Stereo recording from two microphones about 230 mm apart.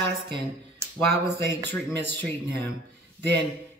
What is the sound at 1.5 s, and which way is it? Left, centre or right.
Speech, centre.